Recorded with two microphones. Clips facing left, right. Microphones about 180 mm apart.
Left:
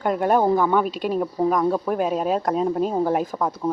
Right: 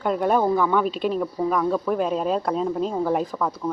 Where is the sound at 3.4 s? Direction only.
25° left (ahead or behind).